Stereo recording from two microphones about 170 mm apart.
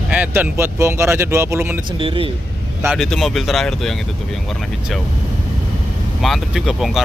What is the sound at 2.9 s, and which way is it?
Speech, centre (ahead or behind).